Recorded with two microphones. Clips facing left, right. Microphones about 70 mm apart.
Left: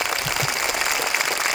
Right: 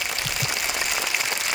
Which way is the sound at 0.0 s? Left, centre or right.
Left.